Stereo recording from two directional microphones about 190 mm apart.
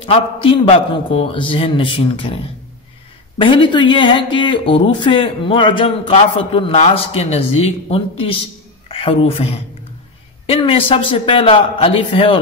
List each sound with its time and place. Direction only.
0.0 s speech: 30° left (ahead or behind)